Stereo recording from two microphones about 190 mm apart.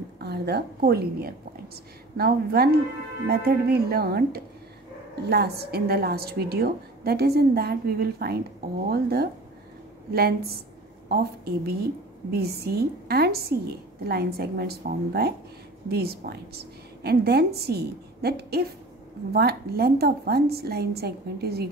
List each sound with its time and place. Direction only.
0.2 s a woman's voice: 60° right (ahead or behind)